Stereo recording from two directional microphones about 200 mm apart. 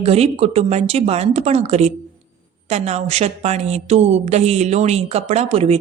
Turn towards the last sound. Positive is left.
turn(degrees=-30)  # may be behind; listen again after turning